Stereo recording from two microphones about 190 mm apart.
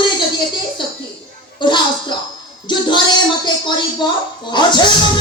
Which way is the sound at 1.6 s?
25° left (ahead or behind).